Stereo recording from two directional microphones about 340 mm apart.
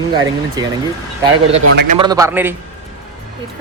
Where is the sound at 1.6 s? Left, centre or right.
Right.